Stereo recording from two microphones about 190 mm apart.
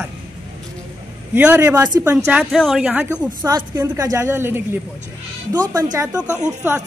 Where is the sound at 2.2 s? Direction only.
Centre (ahead or behind).